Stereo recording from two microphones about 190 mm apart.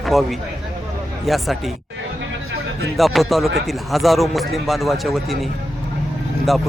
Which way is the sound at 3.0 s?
Centre (ahead or behind).